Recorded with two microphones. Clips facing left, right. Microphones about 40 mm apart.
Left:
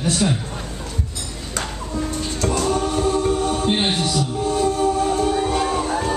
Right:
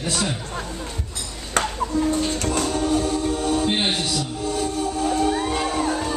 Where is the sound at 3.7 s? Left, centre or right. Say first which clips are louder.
Left 2 dB; centre.